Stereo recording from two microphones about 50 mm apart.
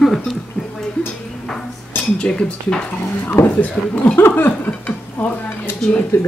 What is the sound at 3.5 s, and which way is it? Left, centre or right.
Speech, left.